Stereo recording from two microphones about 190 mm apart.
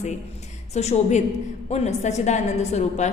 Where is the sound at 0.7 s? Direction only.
35° left (ahead or behind).